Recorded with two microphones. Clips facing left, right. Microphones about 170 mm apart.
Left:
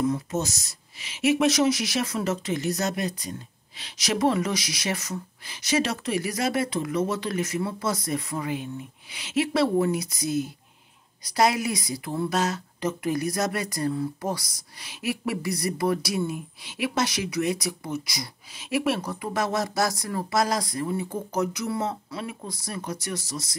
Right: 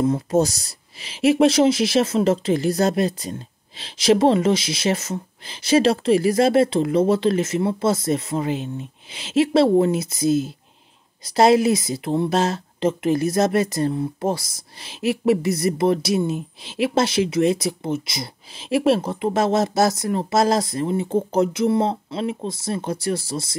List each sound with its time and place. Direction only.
0.0 s speech: 35° right (ahead or behind)